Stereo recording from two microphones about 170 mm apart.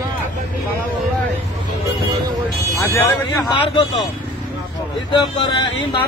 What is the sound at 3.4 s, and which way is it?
Speech, 30° left (ahead or behind).